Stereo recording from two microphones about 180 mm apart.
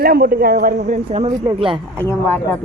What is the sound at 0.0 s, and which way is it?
Speech, 55° right (ahead or behind).